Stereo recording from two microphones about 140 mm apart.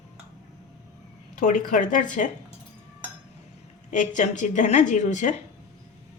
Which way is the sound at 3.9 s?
65° left (ahead or behind).